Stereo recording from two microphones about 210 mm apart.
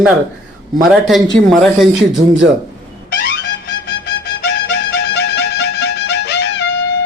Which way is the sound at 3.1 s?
55° left (ahead or behind).